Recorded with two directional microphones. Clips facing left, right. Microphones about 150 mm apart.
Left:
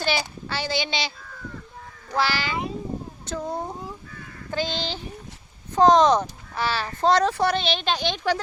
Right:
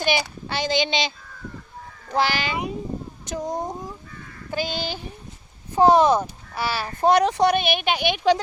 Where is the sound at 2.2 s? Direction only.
20° right (ahead or behind).